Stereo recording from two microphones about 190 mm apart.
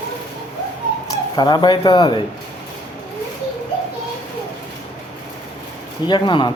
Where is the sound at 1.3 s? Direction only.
20° left (ahead or behind).